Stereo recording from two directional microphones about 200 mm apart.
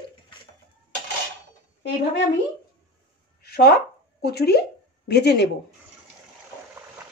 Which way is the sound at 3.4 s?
50° left (ahead or behind).